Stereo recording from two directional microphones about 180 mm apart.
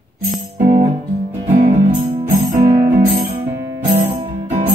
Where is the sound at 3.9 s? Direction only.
35° right (ahead or behind).